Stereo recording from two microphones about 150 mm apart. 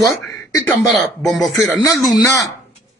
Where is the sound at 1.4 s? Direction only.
20° left (ahead or behind).